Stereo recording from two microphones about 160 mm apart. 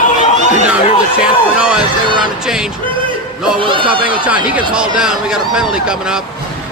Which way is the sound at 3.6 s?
30° right (ahead or behind).